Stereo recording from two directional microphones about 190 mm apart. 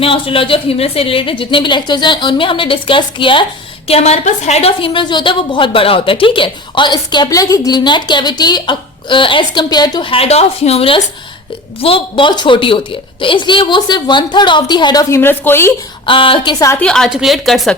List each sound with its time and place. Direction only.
0.0 s a woman's voice: 30° left (ahead or behind); by 15.7 s 10° left (ahead or behind)
16.0 s a woman's voice: 25° left (ahead or behind)
16.8 s a woman's voice: 5° left (ahead or behind)